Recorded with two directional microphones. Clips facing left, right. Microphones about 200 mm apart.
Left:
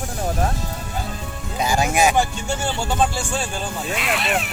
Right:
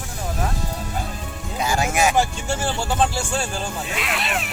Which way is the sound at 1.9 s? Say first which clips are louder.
Left 2 dB; 30° left (ahead or behind).